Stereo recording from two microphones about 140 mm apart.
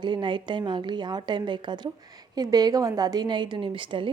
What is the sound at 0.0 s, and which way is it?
A woman's voice, 35° right (ahead or behind).